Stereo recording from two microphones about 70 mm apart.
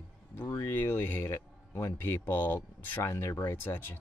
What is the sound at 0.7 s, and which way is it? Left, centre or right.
Speech, left.